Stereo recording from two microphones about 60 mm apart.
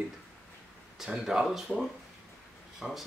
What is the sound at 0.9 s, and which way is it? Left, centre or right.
Speech, centre.